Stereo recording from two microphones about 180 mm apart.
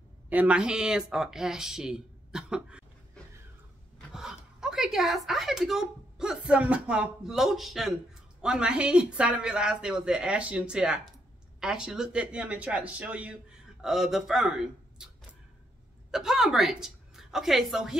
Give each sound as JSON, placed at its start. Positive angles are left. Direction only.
{"t": 0.3, "sound": "speech", "side_deg": -5}
{"t": 4.1, "sound": "speech", "side_deg": -5}
{"t": 15.0, "sound": "arrow", "side_deg": -5}
{"t": 16.1, "sound": "a woman's voice", "side_deg": -5}